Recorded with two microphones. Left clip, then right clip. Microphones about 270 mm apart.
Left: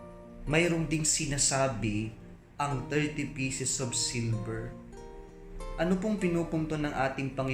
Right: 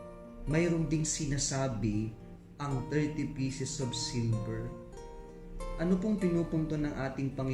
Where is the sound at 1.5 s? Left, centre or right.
Left.